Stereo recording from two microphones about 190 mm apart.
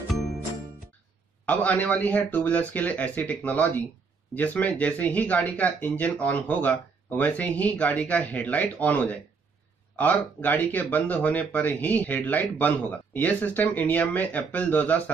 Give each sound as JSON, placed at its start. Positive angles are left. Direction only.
{"t": 1.4, "sound": "speech", "side_deg": 10}